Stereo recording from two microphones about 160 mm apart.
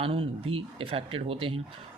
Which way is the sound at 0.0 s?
35° right (ahead or behind).